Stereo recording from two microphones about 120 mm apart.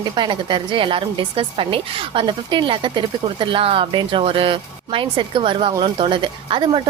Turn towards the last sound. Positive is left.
turn(degrees=-45)  # may be behind; listen again after turning